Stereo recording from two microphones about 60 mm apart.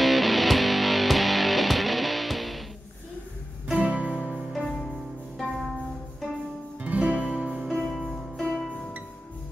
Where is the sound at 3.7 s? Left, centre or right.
Right.